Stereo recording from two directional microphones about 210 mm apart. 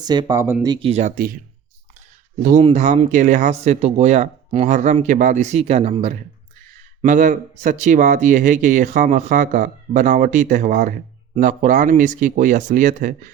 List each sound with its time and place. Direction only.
0.0 s speech: 20° right (ahead or behind); by 1.4 s 45° right (ahead or behind)
2.4 s speech: 40° right (ahead or behind)